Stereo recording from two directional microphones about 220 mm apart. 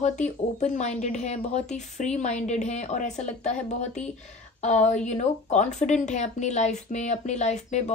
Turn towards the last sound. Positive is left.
turn(degrees=30)  # may be behind; listen again after turning